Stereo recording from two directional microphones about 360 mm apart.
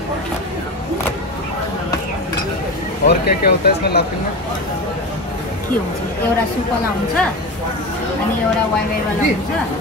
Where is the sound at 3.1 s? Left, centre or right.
Left.